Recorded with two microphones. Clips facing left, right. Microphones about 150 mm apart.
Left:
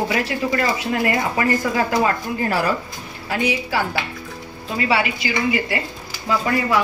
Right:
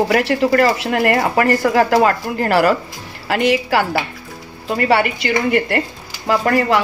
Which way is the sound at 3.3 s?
80° right.